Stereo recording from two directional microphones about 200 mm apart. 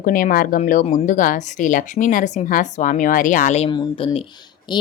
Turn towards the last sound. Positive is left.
turn(degrees=20)  # may be behind; listen again after turning